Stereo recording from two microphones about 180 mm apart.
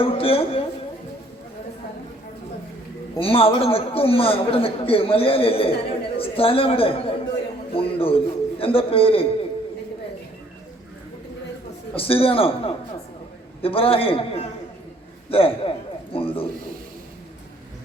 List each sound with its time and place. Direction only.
0.0 s a man's voice: 30° left (ahead or behind)
3.2 s a man's voice: 30° left (ahead or behind)
7.7 s a sound: 30° left (ahead or behind)
11.9 s a man's voice: 30° left (ahead or behind)